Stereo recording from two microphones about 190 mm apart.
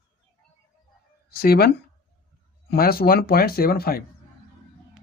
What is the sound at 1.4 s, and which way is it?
Speech, 50° left (ahead or behind).